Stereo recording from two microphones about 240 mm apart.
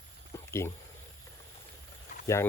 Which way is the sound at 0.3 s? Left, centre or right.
Centre.